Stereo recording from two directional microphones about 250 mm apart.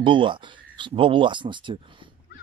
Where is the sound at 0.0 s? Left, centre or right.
Centre.